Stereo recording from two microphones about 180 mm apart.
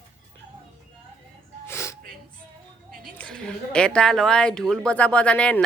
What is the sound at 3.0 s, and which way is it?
A woman's voice, 5° left (ahead or behind).